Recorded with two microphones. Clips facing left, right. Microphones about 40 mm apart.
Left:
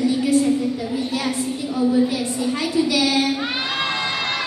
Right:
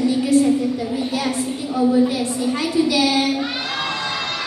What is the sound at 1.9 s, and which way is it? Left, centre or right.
A woman's voice, centre.